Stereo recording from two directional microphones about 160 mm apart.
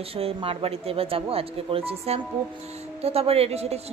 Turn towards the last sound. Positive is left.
turn(degrees=-40)  # may be behind; listen again after turning